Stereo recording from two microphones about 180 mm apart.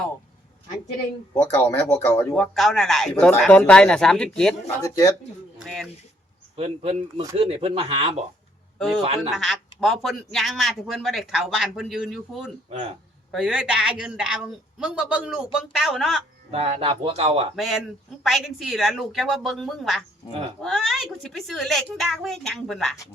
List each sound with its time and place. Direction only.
1.3 s speech: 15° left (ahead or behind)
4.8 s speech: 20° left (ahead or behind)
5.6 s speech: centre (ahead or behind)
6.6 s speech: 35° right (ahead or behind)
9.3 s speech: centre (ahead or behind)
12.7 s speech: 35° right (ahead or behind)
13.3 s speech: 5° right (ahead or behind)
16.5 s speech: 35° right (ahead or behind)
17.6 s speech: centre (ahead or behind)